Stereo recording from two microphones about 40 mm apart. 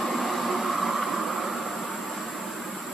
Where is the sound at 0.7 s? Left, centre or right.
Centre.